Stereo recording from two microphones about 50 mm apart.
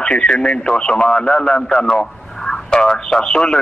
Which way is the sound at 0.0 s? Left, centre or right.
Centre.